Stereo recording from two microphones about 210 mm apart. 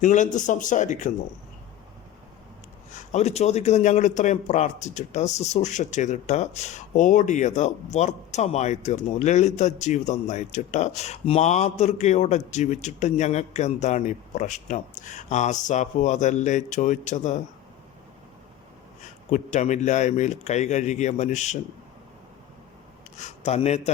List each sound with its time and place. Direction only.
0.0 s a man's voice: 35° left (ahead or behind)
3.1 s a man's voice: 30° left (ahead or behind)
19.3 s a man's voice: 35° left (ahead or behind)
23.1 s a man's voice: 35° left (ahead or behind)